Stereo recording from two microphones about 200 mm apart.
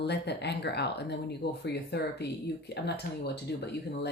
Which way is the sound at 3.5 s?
55° left (ahead or behind).